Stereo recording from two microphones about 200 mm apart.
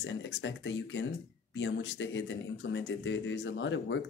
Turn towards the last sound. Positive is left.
turn(degrees=65)  # may be behind; listen again after turning